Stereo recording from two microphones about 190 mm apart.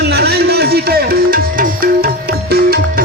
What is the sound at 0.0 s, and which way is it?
Music, 60° right (ahead or behind).